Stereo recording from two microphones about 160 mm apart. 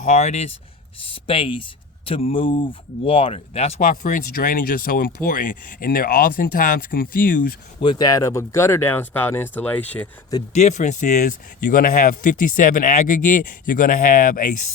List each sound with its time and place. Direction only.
0.0 s speech: 45° left (ahead or behind)
3.8 s speech: 55° left (ahead or behind)
7.8 s speech: 30° left (ahead or behind); by 10.1 s 10° left (ahead or behind)
10.5 s speech: 45° left (ahead or behind)